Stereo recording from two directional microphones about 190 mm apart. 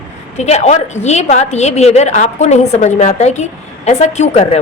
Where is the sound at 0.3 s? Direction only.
35° left (ahead or behind).